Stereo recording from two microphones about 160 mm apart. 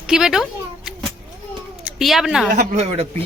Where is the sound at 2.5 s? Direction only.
40° right (ahead or behind).